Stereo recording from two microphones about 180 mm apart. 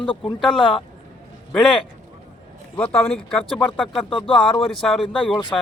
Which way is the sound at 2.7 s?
5° left (ahead or behind).